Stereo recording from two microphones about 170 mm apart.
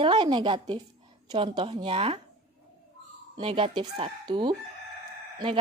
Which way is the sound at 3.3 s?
30° right (ahead or behind).